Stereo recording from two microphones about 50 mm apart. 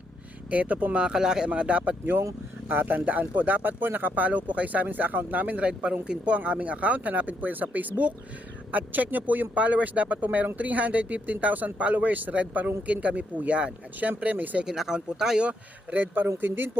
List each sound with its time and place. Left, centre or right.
0.5 s speech: right
0.9 s speech: centre
1.5 s speech: right
2.6 s speech: right
14.2 s speech: right
14.6 s speech: centre
15.4 s speech: right